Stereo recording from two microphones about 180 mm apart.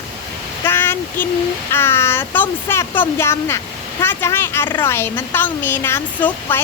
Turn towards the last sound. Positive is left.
turn(degrees=10)  # may be behind; listen again after turning